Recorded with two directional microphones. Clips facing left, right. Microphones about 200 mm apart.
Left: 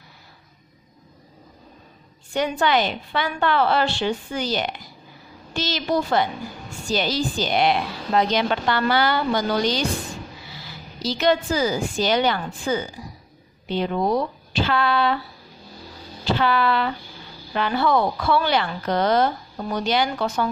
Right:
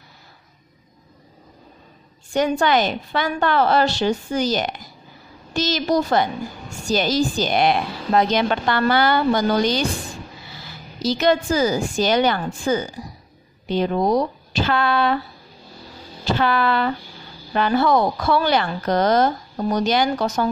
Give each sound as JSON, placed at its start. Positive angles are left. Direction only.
{"t": 2.3, "sound": "a woman's voice", "side_deg": -45}
{"t": 11.0, "sound": "a woman's voice", "side_deg": -45}
{"t": 16.3, "sound": "a woman's voice", "side_deg": -45}